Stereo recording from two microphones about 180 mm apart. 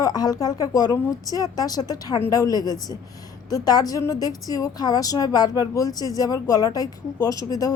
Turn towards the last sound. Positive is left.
turn(degrees=20)  # may be behind; listen again after turning